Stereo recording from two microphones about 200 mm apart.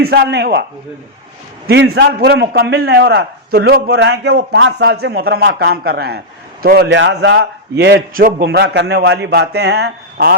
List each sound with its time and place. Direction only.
0.0 s a man's voice: 55° right (ahead or behind)
1.6 s a man's voice: 60° right (ahead or behind)